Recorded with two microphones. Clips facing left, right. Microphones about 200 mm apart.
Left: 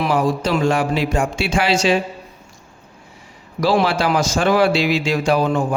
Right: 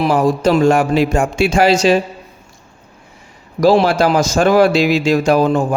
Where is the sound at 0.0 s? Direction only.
45° right (ahead or behind).